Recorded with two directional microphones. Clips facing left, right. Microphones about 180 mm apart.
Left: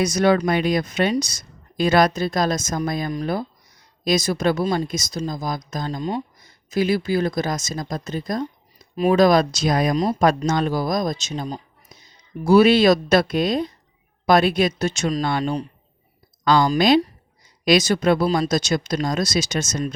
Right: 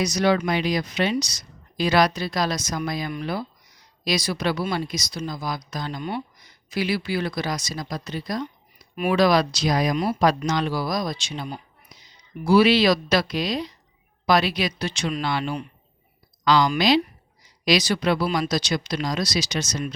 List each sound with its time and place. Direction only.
0.0 s speech: 50° left (ahead or behind)
9.9 s speech: 35° left (ahead or behind)
10.2 s speech: 45° left (ahead or behind)
11.9 s a sound: 50° left (ahead or behind)
12.5 s speech: 45° left (ahead or behind)